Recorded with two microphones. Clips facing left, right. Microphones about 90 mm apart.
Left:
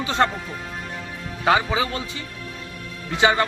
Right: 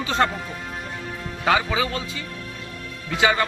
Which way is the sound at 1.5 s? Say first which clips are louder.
Left 1 dB; 25° left (ahead or behind).